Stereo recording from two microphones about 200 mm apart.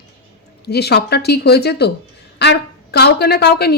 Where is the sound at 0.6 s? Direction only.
55° left (ahead or behind).